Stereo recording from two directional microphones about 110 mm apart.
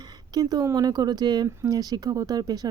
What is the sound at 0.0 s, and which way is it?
Speech, 35° right (ahead or behind).